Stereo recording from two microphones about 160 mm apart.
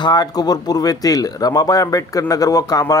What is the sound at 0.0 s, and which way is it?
Speech, 25° left (ahead or behind).